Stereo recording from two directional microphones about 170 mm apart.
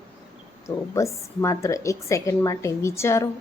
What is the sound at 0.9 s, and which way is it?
A woman's voice, 15° left (ahead or behind).